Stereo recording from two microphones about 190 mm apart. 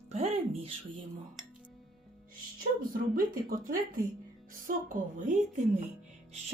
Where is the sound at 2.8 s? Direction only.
50° right (ahead or behind).